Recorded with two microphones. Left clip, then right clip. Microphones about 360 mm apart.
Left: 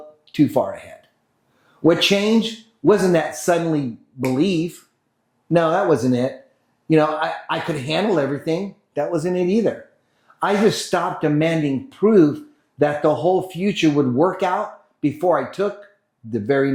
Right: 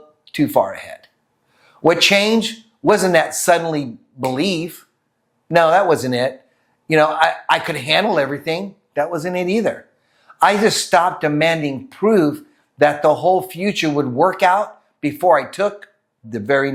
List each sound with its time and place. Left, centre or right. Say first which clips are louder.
0.3 s speech: right 2 dB; right
5.5 s speech: right 4 dB; right